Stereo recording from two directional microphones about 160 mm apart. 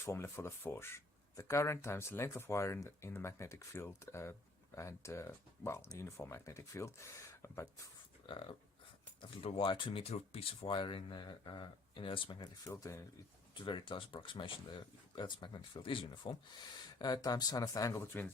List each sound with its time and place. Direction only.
0.0 s speech: 15° left (ahead or behind)
8.3 s speech: 30° left (ahead or behind)
13.5 s speech: 30° left (ahead or behind)